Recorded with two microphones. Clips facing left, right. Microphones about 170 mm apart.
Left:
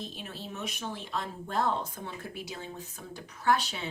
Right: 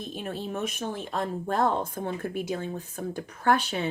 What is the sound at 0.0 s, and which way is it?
Speech, 50° right (ahead or behind).